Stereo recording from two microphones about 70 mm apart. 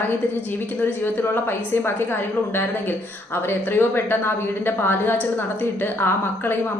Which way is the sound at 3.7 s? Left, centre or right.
Left.